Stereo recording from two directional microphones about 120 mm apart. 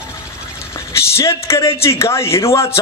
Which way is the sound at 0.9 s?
25° left (ahead or behind).